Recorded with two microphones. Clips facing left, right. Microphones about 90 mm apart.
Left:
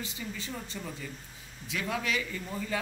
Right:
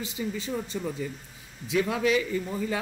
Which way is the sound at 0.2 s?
20° right (ahead or behind).